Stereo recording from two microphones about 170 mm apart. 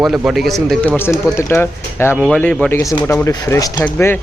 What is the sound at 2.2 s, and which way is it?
Speech, centre (ahead or behind).